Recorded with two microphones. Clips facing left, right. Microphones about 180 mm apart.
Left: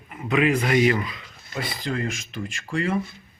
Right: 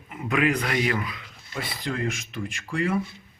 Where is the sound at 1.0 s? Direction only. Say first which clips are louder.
Left 1 dB; 5° right (ahead or behind).